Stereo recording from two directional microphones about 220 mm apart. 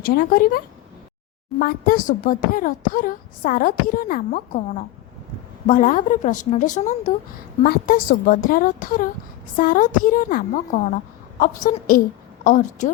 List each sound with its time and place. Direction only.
0.0 s a woman's voice: 40° left (ahead or behind)